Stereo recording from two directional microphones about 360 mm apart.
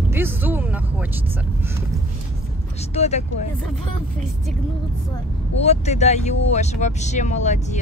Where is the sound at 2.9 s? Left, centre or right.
Centre.